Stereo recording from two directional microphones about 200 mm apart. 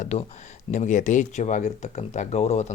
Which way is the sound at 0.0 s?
35° left (ahead or behind).